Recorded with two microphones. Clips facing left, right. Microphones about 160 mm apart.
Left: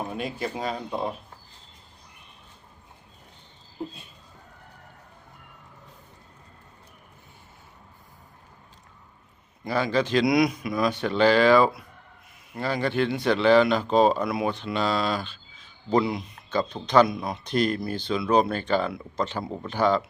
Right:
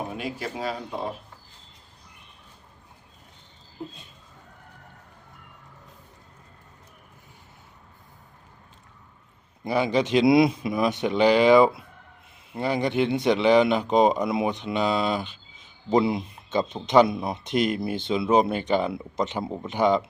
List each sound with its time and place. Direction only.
0.1 s speech: 10° right (ahead or behind)
9.6 s speech: 20° right (ahead or behind)